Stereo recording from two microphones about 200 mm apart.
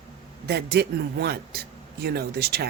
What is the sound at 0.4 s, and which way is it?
A woman's voice, 55° right (ahead or behind).